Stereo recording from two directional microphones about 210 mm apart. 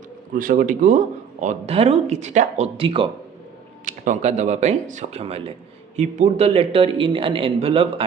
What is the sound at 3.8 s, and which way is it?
A man's voice, 35° right (ahead or behind).